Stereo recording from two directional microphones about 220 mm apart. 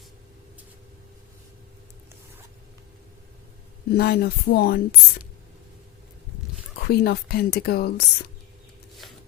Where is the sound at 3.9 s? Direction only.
45° left (ahead or behind).